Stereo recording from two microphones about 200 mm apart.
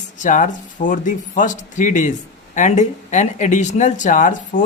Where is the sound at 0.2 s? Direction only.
40° left (ahead or behind).